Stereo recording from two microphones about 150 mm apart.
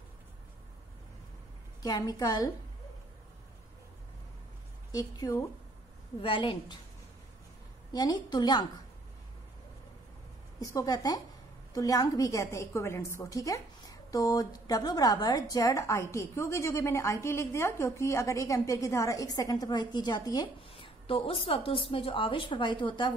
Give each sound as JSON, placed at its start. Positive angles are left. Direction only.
{"t": 1.8, "sound": "a woman's voice", "side_deg": 25}
{"t": 4.9, "sound": "a woman's voice", "side_deg": 25}
{"t": 6.2, "sound": "a woman's voice", "side_deg": 35}
{"t": 7.9, "sound": "a woman's voice", "side_deg": 30}
{"t": 10.6, "sound": "a woman's voice", "side_deg": 20}
{"t": 20.7, "sound": "a woman's voice", "side_deg": 35}